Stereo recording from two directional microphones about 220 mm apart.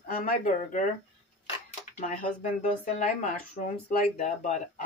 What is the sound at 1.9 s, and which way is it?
Speech, 35° left (ahead or behind).